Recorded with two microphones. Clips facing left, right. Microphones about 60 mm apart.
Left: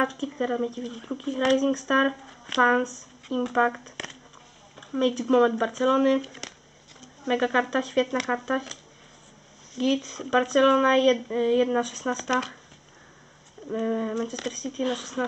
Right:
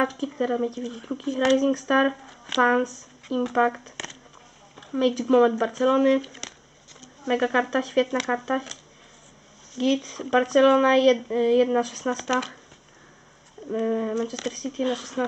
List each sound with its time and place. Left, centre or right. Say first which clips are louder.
0.0 s speech: right 2 dB; centre
9.8 s speech: right 2 dB; centre
13.7 s speech: right 2 dB; centre